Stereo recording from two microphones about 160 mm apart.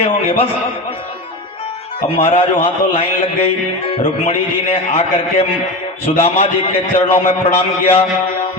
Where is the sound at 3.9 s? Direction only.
35° left (ahead or behind).